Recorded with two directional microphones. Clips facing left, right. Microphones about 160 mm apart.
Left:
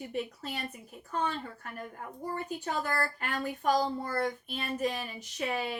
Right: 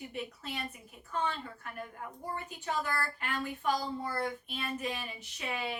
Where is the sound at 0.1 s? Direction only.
40° left (ahead or behind).